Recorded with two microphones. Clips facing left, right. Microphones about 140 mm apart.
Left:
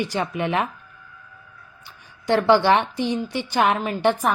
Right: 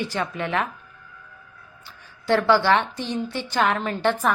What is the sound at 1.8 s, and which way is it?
A woman's voice, 15° left (ahead or behind).